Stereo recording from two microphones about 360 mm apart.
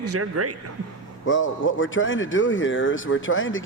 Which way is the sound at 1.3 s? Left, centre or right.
Left.